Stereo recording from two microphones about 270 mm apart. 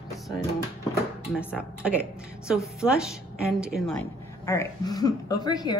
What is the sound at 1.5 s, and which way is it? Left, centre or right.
A woman's voice, centre.